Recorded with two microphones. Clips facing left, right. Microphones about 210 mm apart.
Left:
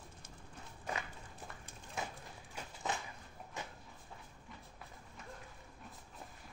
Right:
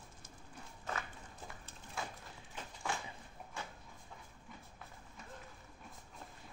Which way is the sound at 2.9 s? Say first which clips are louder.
Left 1 dB; 20° left (ahead or behind).